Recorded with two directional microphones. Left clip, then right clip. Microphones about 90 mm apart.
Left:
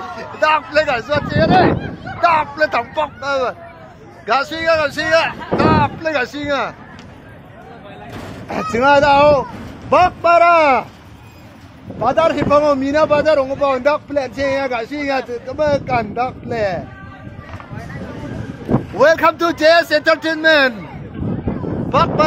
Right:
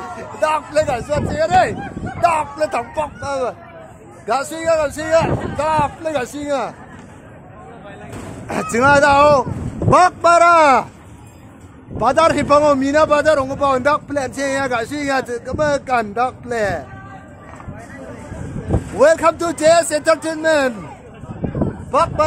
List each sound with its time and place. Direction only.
0.4 s speech: centre (ahead or behind); by 1.2 s 15° right (ahead or behind)
1.3 s speech: 35° right (ahead or behind)
2.2 s speech: 15° right (ahead or behind)
8.5 s speech: 40° right (ahead or behind)
9.9 s a man's voice: 60° right (ahead or behind)
12.0 s a man's voice: 85° right; by 16.8 s 40° right (ahead or behind)
18.9 s speech: 5° left (ahead or behind)
21.9 s speech: 10° right (ahead or behind)